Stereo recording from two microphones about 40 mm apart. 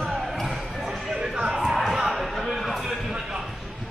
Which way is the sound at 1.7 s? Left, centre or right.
Centre.